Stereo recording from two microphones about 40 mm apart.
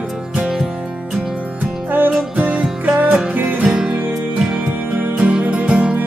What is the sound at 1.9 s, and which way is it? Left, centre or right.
Music, right.